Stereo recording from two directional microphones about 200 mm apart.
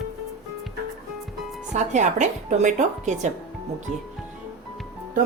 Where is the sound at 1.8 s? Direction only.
35° right (ahead or behind).